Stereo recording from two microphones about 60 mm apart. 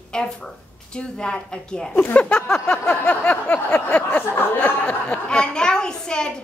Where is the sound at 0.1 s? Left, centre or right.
Centre.